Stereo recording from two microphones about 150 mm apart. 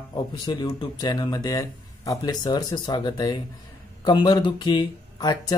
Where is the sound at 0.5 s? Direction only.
30° left (ahead or behind).